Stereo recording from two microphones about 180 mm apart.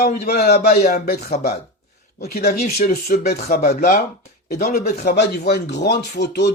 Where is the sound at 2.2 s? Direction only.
60° left (ahead or behind).